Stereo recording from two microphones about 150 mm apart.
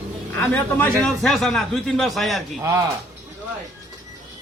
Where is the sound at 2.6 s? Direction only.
20° right (ahead or behind).